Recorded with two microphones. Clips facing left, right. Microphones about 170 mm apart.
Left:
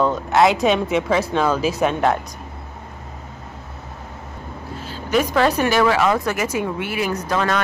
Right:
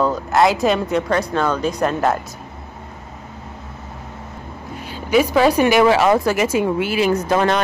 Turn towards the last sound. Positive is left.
turn(degrees=-25)  # may be behind; listen again after turning